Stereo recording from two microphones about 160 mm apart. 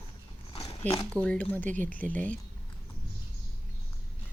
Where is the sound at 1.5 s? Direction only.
10° left (ahead or behind).